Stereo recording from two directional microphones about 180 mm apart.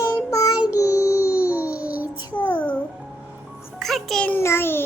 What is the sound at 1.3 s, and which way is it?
Child singing, 10° right (ahead or behind).